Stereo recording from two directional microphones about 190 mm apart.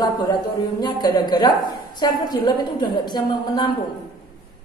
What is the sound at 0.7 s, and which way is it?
A woman's voice, 20° left (ahead or behind).